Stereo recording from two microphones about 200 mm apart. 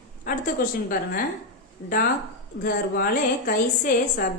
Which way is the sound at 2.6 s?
45° left (ahead or behind).